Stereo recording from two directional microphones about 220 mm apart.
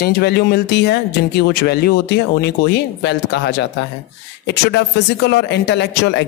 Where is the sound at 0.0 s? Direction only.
45° left (ahead or behind).